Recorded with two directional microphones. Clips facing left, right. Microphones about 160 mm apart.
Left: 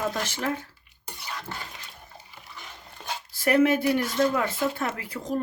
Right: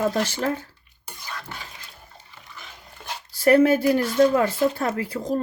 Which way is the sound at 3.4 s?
35° right (ahead or behind).